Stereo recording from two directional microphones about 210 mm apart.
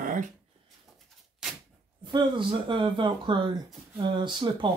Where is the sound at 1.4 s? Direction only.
5° right (ahead or behind).